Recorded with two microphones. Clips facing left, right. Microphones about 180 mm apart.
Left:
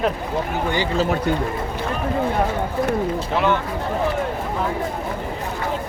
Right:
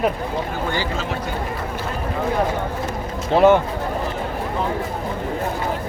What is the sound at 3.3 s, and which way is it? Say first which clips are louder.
Speech: right 8 dB; 45° right (ahead or behind).